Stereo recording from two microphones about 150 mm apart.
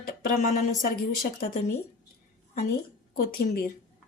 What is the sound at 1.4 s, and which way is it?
Speech, 55° left (ahead or behind).